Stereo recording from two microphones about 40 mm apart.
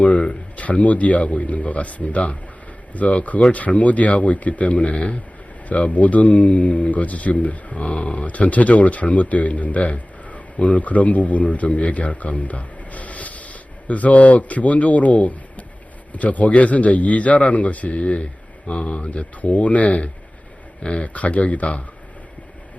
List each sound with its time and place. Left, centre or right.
0.5 s speech: left